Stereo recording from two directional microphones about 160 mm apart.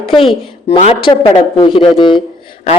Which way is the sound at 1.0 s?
35° left (ahead or behind).